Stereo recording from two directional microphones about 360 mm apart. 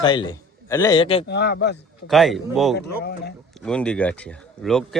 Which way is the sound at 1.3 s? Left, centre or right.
Left.